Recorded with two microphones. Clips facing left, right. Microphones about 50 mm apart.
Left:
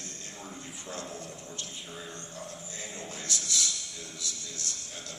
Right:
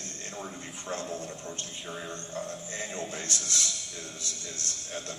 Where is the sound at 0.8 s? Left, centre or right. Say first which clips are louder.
Right 6 dB; right.